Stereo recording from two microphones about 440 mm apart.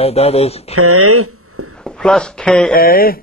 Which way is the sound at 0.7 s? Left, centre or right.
Right.